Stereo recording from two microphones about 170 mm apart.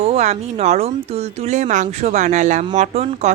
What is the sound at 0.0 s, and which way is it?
Speech, 40° right (ahead or behind).